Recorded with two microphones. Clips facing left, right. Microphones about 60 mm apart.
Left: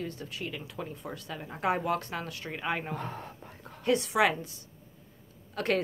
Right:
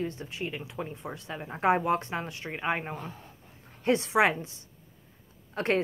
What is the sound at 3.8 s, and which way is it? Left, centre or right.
Speech, right.